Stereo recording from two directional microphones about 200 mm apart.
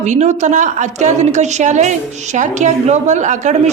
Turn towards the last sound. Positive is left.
turn(degrees=-35)  # may be behind; listen again after turning